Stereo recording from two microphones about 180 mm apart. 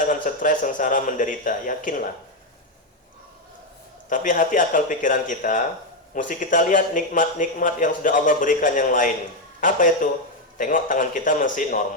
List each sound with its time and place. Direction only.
0.0 s speech: 45° left (ahead or behind)
4.1 s speech: 45° left (ahead or behind)